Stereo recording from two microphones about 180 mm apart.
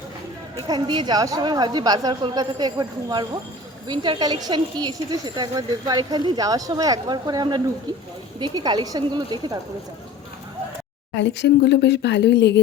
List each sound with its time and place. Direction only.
0.7 s a woman's voice: 25° right (ahead or behind)
11.2 s speech: 75° left (ahead or behind)